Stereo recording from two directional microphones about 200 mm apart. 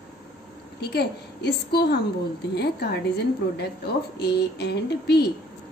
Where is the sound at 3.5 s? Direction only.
55° left (ahead or behind).